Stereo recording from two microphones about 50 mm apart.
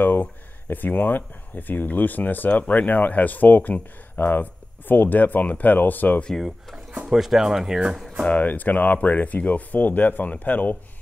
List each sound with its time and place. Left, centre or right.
0.0 s speech: left
7.1 s speech: centre
8.3 s speech: left